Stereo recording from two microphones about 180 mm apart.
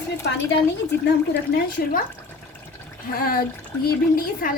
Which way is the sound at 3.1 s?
55° left (ahead or behind).